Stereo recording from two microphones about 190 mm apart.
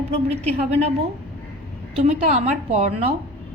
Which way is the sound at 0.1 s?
35° right (ahead or behind).